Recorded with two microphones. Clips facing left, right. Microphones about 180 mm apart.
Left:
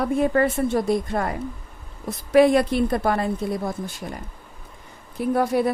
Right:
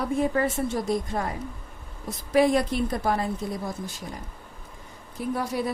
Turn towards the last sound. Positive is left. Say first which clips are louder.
# left 7 dB
turn(degrees=55)  # may be behind; listen again after turning